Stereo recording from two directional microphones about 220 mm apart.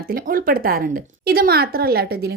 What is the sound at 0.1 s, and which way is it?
A woman's voice, 40° right (ahead or behind).